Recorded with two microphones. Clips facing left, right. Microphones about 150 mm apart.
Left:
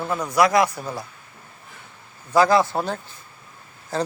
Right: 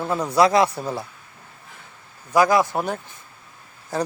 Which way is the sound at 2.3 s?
15° right (ahead or behind).